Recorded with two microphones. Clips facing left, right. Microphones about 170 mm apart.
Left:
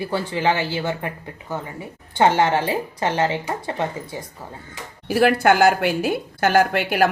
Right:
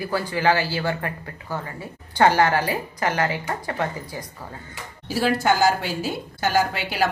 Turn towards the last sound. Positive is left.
turn(degrees=55)  # may be behind; listen again after turning